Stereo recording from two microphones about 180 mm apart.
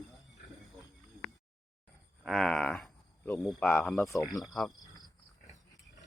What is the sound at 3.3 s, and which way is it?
Speech, 5° left (ahead or behind).